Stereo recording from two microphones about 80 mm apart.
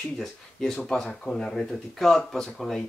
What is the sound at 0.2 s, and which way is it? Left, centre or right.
Speech, centre.